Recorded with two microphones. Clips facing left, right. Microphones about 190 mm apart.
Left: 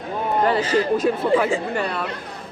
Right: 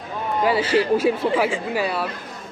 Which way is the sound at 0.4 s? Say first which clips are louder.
Right 2 dB; 10° right (ahead or behind).